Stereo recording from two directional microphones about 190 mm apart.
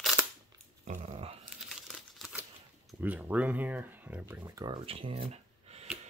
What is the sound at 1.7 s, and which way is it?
Crumpling, centre (ahead or behind).